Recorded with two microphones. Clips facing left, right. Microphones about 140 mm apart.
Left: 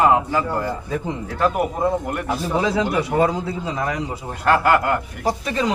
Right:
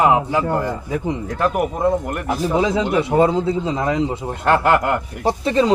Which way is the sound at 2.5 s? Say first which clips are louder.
Right 2 dB; 20° right (ahead or behind).